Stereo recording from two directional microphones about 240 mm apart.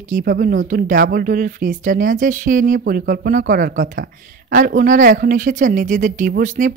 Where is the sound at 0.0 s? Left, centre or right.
Right.